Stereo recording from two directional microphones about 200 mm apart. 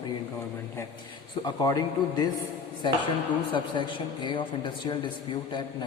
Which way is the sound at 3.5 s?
25° left (ahead or behind).